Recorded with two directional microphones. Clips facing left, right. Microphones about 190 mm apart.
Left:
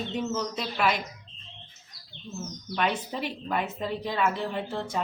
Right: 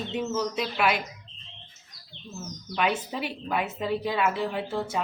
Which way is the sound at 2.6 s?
5° right (ahead or behind).